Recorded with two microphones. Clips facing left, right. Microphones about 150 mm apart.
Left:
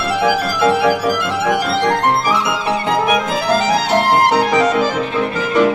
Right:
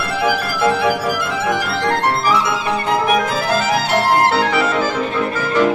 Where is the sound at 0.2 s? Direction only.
20° left (ahead or behind).